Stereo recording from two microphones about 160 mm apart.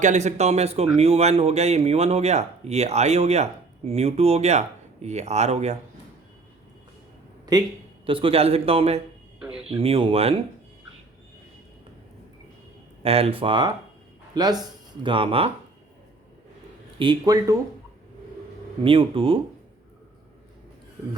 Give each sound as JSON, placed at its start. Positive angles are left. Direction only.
{"t": 0.0, "sound": "speech", "side_deg": -50}
{"t": 8.0, "sound": "speech", "side_deg": -35}
{"t": 9.4, "sound": "a sound", "side_deg": -5}
{"t": 9.6, "sound": "speech", "side_deg": -35}
{"t": 13.0, "sound": "speech", "side_deg": -40}
{"t": 17.0, "sound": "speech", "side_deg": -25}
{"t": 18.8, "sound": "speech", "side_deg": -35}